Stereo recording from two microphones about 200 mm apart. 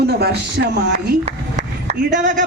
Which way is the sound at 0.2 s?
55° right (ahead or behind).